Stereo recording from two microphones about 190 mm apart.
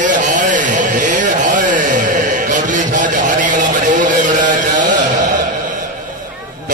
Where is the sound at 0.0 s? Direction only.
40° right (ahead or behind).